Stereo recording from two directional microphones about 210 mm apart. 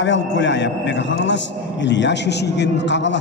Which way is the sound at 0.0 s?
60° left (ahead or behind).